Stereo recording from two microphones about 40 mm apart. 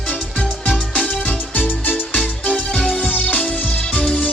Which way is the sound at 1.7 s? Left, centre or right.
Left.